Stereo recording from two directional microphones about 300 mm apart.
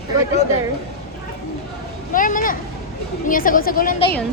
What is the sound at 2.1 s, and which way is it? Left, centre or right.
A woman's voice, left.